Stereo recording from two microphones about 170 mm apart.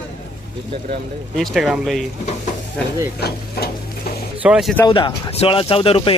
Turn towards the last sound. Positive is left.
turn(degrees=30)  # may be behind; listen again after turning